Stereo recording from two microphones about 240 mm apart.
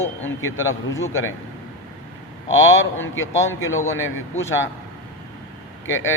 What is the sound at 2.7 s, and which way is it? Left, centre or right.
A man's voice, left.